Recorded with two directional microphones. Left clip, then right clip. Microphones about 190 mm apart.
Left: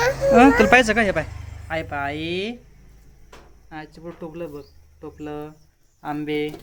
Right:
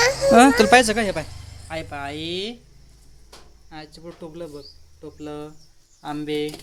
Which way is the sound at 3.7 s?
10° left (ahead or behind).